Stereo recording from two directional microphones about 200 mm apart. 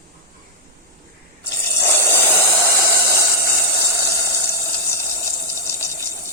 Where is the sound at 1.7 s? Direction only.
10° left (ahead or behind).